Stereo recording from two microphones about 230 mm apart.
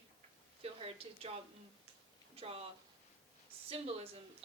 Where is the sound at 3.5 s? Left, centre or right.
Right.